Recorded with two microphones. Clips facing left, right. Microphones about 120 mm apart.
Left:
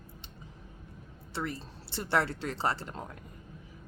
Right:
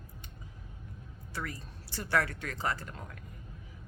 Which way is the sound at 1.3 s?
25° left (ahead or behind).